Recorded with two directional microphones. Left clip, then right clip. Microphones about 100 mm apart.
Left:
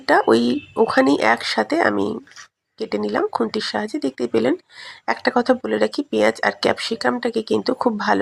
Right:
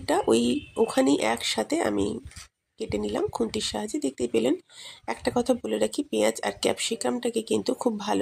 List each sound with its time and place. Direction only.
0.0 s speech: 15° left (ahead or behind)